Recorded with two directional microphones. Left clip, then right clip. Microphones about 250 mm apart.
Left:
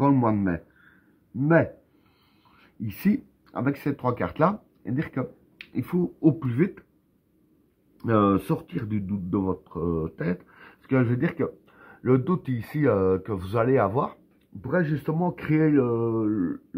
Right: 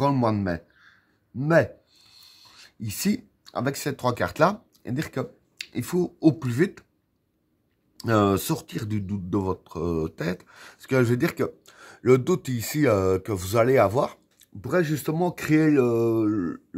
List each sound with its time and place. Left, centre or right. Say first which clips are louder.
0.0 s a sound: left 1 dB; right
1.4 s speech: right 1 dB; right
8.0 s speech: even; right